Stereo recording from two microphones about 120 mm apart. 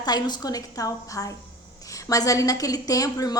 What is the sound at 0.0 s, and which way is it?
A woman's voice, 35° left (ahead or behind).